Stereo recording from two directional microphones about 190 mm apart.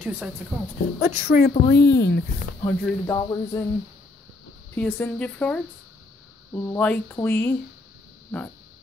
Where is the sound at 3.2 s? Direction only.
20° left (ahead or behind).